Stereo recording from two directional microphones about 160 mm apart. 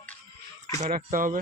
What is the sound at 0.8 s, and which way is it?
Speech, 55° right (ahead or behind).